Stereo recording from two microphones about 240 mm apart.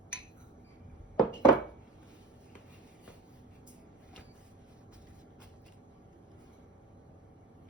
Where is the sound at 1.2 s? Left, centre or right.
Centre.